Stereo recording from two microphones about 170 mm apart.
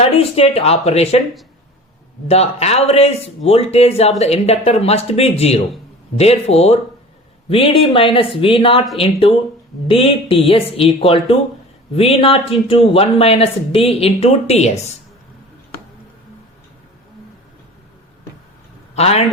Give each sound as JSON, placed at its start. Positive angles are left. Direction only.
{"t": 0.0, "sound": "speech", "side_deg": 35}
{"t": 2.2, "sound": "speech", "side_deg": 40}
{"t": 18.9, "sound": "speech", "side_deg": 40}